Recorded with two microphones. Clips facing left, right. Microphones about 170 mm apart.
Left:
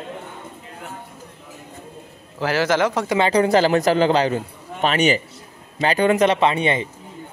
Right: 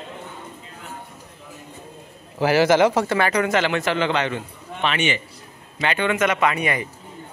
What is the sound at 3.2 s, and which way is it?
A man's voice, 30° left (ahead or behind).